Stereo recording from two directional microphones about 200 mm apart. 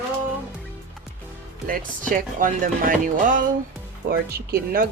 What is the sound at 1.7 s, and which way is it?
Speech, 40° right (ahead or behind).